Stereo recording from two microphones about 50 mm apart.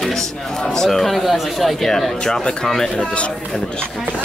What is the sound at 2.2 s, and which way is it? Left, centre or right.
Speech, centre.